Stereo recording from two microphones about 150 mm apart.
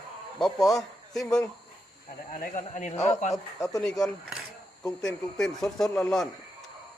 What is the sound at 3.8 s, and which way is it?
Speech, 5° left (ahead or behind).